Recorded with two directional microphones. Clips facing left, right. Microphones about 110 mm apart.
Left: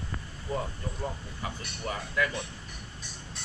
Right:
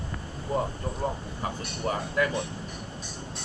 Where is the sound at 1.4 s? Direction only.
35° right (ahead or behind).